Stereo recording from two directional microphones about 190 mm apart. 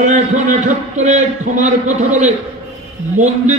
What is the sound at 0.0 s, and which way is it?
A man's voice, 40° right (ahead or behind).